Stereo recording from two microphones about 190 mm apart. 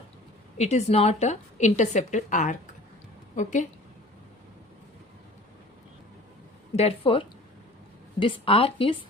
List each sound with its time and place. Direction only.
0.5 s a woman's voice: 35° left (ahead or behind)
6.7 s a woman's voice: 30° left (ahead or behind)